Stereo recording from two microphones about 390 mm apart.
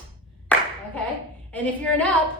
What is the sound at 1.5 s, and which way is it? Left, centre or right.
Speech, centre.